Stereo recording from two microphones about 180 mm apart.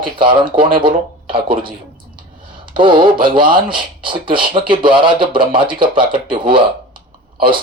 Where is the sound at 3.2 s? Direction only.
30° right (ahead or behind).